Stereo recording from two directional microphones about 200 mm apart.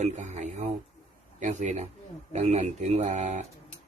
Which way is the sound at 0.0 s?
35° right (ahead or behind).